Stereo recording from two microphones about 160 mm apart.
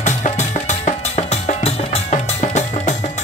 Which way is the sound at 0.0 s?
45° left (ahead or behind).